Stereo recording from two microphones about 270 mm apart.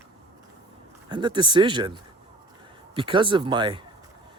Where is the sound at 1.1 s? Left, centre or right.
Centre.